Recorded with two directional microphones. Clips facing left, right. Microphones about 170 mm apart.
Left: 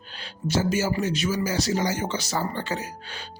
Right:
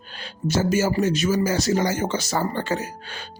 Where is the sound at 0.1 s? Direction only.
50° right (ahead or behind).